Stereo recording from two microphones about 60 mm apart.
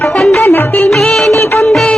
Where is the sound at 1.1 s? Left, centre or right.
Centre.